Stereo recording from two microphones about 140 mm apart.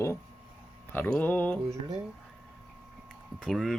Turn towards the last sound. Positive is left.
turn(degrees=0)  # may be behind; listen again after turning